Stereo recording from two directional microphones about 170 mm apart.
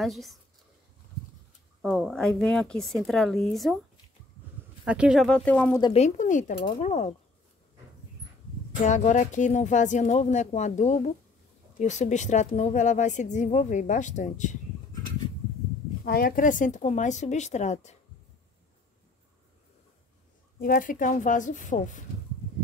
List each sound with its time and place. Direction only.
0.0 s speech: centre (ahead or behind)
1.8 s speech: centre (ahead or behind)
4.8 s speech: 5° right (ahead or behind)
5.9 s speech: 45° left (ahead or behind)
8.8 s speech: 45° left (ahead or behind)
16.0 s speech: 60° left (ahead or behind); by 17.9 s 45° left (ahead or behind)
20.5 s speech: 60° left (ahead or behind)